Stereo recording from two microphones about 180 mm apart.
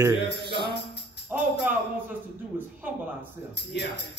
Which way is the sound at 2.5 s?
10° right (ahead or behind).